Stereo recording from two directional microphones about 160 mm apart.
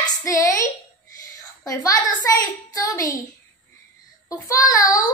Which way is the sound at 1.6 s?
20° left (ahead or behind).